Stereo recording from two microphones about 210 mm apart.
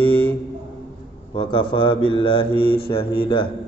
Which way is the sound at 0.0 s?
90° left.